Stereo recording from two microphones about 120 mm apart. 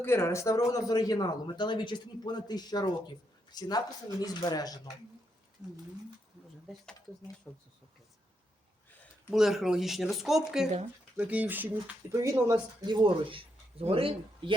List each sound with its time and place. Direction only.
0.0 s speech: 20° left (ahead or behind)
7.5 s speech: 20° left (ahead or behind)
9.3 s speech: 5° right (ahead or behind); by 12.5 s 25° right (ahead or behind)
12.8 s speech: 40° right (ahead or behind)